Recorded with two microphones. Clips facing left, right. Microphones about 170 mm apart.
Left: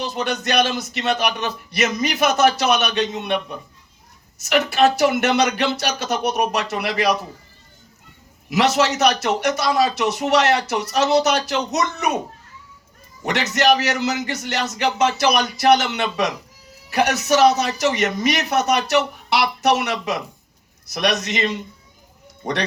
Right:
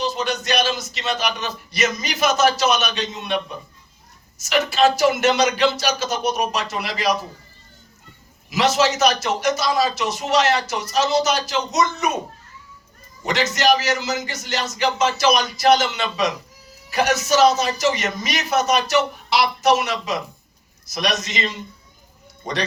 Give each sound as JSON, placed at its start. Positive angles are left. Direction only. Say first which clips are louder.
{"t": 0.0, "sound": "a man's voice", "louder": "even", "side_deg": 60}
{"t": 8.4, "sound": "a man's voice", "louder": "left 1 dB", "side_deg": 65}
{"t": 13.2, "sound": "a man's voice", "louder": "left 1 dB", "side_deg": 65}